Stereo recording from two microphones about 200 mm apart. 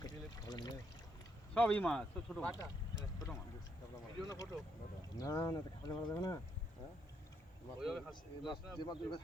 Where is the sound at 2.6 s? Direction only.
15° left (ahead or behind).